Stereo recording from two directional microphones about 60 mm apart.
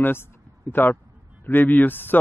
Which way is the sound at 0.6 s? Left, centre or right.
Left.